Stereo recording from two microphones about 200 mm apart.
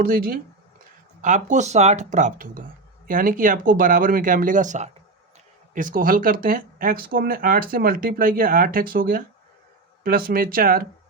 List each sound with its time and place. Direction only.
0.0 s speech: 45° right (ahead or behind)